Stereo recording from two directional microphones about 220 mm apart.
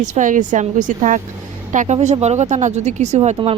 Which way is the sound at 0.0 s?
35° right (ahead or behind).